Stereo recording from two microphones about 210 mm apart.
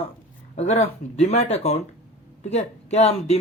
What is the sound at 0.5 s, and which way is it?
Speech, 30° left (ahead or behind).